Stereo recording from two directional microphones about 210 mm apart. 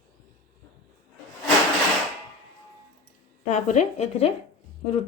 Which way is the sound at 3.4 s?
35° left (ahead or behind).